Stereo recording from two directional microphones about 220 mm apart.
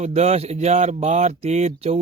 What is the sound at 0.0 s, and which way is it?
Speech, 30° right (ahead or behind).